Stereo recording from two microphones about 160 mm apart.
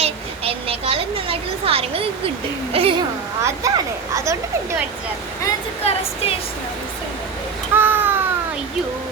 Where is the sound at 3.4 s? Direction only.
20° right (ahead or behind).